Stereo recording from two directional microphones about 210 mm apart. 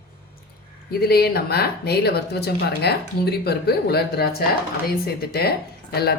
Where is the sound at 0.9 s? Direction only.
50° left (ahead or behind).